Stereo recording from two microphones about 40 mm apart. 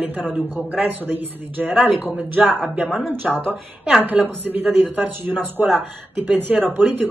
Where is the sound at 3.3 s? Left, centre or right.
Centre.